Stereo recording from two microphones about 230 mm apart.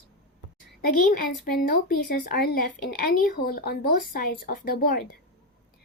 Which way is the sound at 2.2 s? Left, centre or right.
Left.